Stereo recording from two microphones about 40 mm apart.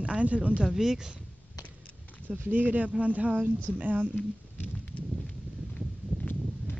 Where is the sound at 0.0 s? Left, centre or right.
Right.